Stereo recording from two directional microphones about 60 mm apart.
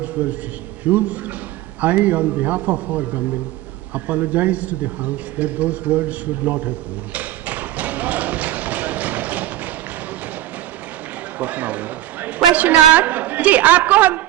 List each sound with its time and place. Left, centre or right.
0.0 s a man's voice: right
3.9 s a sound: right
11.3 s a man's voice: right